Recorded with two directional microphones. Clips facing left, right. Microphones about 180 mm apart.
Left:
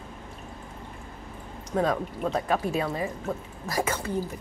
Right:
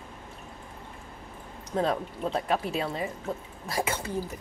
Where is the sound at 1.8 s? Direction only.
25° right (ahead or behind).